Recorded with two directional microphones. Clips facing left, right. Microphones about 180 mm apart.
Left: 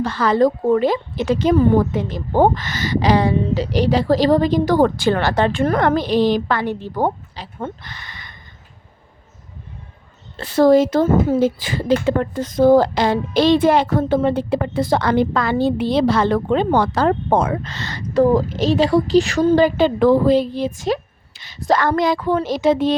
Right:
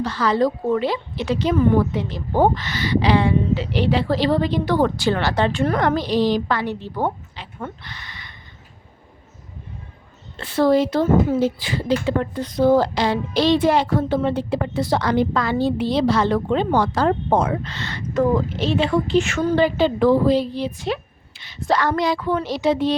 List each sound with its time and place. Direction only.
0.0 s speech: 50° left (ahead or behind)
10.3 s speech: 40° left (ahead or behind); by 17.5 s 65° left (ahead or behind)
17.6 s a woman's voice: 40° left (ahead or behind)